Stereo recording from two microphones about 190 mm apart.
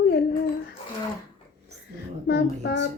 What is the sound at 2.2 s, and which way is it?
Female singing, 60° left (ahead or behind).